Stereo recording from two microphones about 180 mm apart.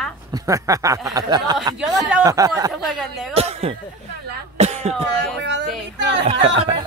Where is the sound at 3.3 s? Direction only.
35° right (ahead or behind).